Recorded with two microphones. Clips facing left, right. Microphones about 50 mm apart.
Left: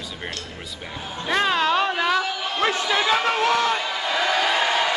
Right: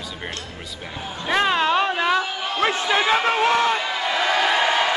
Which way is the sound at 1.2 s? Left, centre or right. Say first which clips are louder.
Right 1 dB; centre.